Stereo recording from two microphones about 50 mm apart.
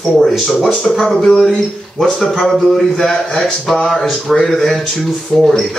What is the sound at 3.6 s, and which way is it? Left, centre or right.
Speech, centre.